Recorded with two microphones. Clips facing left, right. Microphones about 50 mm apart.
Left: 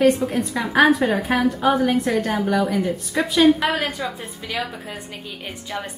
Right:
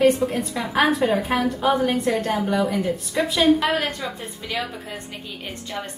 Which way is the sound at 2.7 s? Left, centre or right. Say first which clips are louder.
Left 1 dB; left.